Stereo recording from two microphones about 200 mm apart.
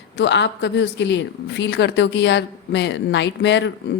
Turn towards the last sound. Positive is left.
turn(degrees=65)  # may be behind; listen again after turning